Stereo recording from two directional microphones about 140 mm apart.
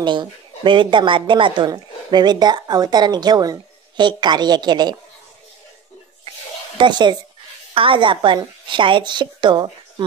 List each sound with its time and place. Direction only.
0.0 s speech: 35° right (ahead or behind)
6.8 s a woman's voice: 35° right (ahead or behind)